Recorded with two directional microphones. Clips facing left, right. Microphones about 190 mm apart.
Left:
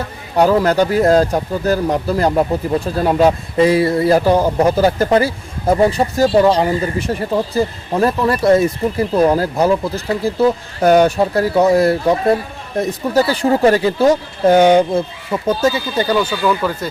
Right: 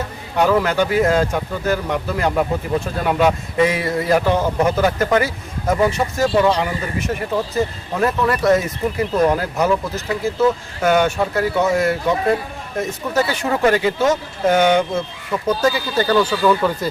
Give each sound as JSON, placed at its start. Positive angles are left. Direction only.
{"t": 0.3, "sound": "speech", "side_deg": 35}
{"t": 16.0, "sound": "speech", "side_deg": 5}